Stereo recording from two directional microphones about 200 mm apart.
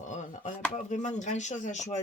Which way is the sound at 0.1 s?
35° left (ahead or behind).